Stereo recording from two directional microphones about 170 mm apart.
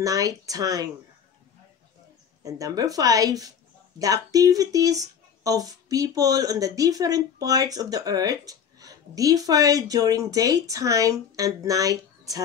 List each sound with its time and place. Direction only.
0.0 s speech: 20° right (ahead or behind)
2.4 s speech: 20° right (ahead or behind)